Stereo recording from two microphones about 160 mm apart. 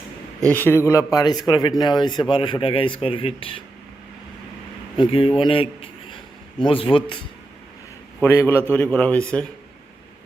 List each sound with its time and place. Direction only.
0.3 s a man's voice: 10° left (ahead or behind); by 3.6 s 35° left (ahead or behind)
4.9 s speech: 35° left (ahead or behind)
8.2 s speech: 15° left (ahead or behind)